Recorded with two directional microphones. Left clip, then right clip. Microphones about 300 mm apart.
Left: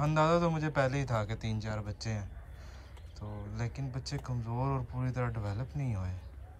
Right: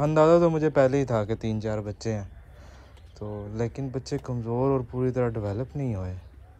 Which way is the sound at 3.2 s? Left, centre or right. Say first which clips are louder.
Right 11 dB; right.